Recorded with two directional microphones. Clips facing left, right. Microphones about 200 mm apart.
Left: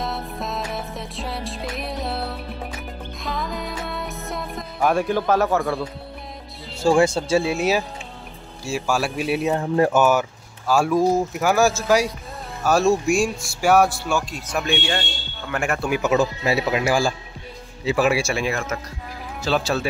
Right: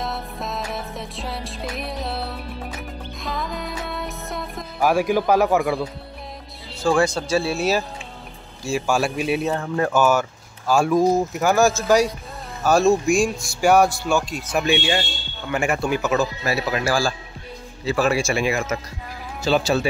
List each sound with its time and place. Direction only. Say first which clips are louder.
0.0 s music: left 1 dB; centre (ahead or behind)
5.6 s speech: right 2 dB; centre (ahead or behind)
6.8 s speech: left 2 dB; 25° left (ahead or behind)
8.6 s speech: right 2 dB; 5° left (ahead or behind)
9.5 s speech: left 3 dB; 20° left (ahead or behind)
10.7 s speech: right 1 dB; 5° left (ahead or behind)
16.0 s a man's voice: left 2 dB; 15° left (ahead or behind)